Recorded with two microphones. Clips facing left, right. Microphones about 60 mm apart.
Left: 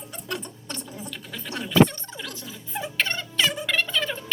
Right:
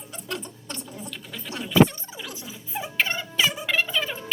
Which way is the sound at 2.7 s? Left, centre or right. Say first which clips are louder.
Right 1 dB; centre.